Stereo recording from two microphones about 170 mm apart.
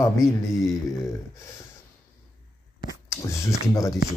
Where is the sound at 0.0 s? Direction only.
15° left (ahead or behind).